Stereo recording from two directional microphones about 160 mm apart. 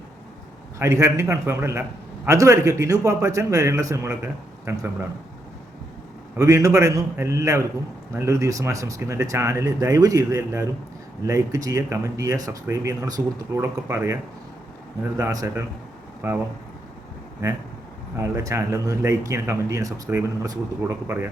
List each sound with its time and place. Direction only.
0.8 s speech: 15° right (ahead or behind)
6.3 s speech: 20° right (ahead or behind)
15.2 s speech: 20° right (ahead or behind)
18.2 s speech: 15° right (ahead or behind)